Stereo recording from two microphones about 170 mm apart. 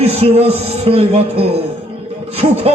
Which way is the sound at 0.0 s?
35° right (ahead or behind).